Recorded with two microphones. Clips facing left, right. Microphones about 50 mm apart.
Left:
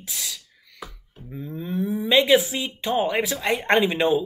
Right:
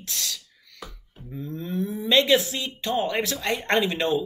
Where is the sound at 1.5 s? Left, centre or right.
Centre.